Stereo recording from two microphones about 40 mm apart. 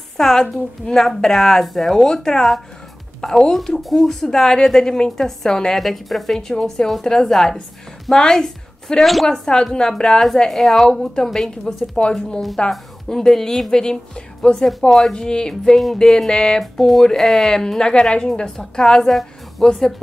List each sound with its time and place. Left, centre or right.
0.2 s a woman's voice: centre
1.3 s a woman's voice: centre
5.8 s a woman's voice: centre
9.0 s speech: centre
9.3 s a woman's voice: centre
16.7 s a woman's voice: centre